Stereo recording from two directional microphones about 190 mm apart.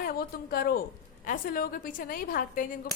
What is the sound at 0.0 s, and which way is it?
A woman's voice, 50° left (ahead or behind).